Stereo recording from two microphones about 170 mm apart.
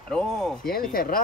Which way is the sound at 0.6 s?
60° left (ahead or behind).